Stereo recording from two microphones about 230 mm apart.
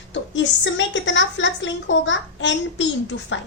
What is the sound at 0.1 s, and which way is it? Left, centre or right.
A woman's voice, left.